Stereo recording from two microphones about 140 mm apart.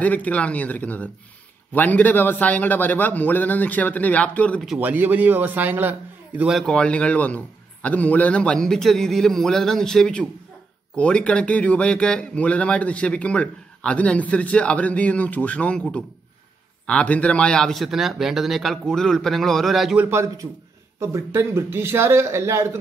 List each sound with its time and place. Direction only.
0.0 s speech: 10° left (ahead or behind)
4.7 s a man's voice: 10° right (ahead or behind)
20.1 s speech: 20° right (ahead or behind)